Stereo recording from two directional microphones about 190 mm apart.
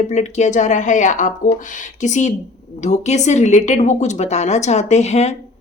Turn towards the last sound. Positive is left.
turn(degrees=35)  # may be behind; listen again after turning